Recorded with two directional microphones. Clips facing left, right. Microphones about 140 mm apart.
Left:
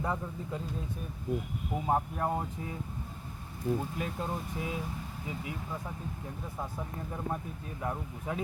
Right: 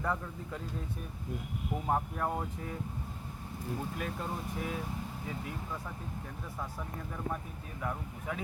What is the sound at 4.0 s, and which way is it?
Speech, 20° left (ahead or behind).